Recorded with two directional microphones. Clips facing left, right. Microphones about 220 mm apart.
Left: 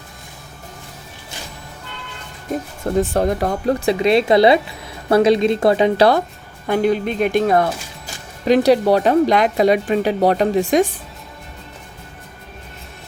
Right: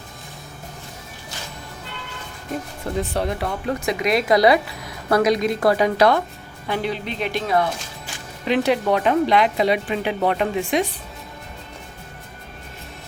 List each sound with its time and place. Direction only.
3.0 s speech: 45° left (ahead or behind)
6.7 s speech: 45° left (ahead or behind)